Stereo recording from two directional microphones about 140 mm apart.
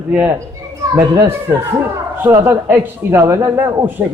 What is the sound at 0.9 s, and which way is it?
Speech, 25° right (ahead or behind).